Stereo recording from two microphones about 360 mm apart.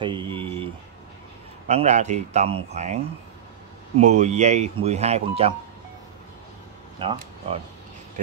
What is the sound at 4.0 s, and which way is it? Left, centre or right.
Speech, centre.